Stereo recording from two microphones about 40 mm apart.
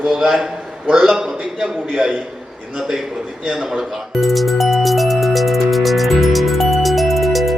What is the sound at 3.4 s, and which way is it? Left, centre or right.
Speech, centre.